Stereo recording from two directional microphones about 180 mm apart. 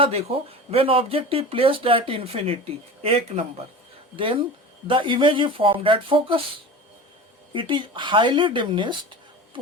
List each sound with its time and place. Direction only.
0.0 s speech: 35° right (ahead or behind)
7.5 s speech: 30° right (ahead or behind)